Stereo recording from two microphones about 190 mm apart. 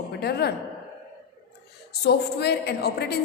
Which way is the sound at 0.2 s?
60° left (ahead or behind).